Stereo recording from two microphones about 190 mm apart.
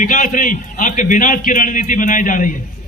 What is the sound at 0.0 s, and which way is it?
A man's voice, 45° left (ahead or behind).